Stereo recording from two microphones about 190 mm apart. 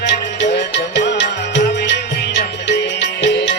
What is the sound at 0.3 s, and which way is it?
Music, 65° left (ahead or behind).